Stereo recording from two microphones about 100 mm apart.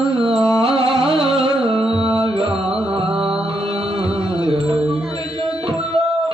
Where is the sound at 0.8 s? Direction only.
65° right (ahead or behind).